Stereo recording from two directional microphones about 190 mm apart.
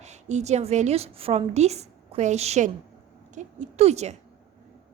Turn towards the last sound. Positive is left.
turn(degrees=-35)  # may be behind; listen again after turning